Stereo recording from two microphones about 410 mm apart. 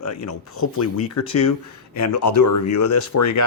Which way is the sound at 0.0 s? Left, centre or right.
Left.